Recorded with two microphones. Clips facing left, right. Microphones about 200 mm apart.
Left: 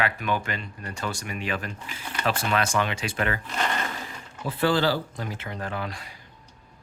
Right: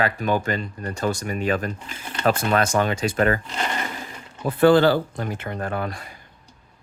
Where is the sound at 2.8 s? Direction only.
45° right (ahead or behind).